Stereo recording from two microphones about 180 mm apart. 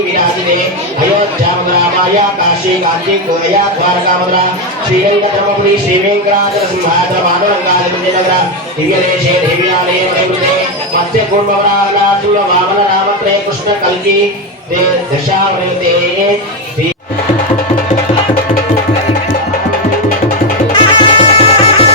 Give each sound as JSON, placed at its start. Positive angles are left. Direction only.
{"t": 20.7, "sound": "music", "side_deg": 30}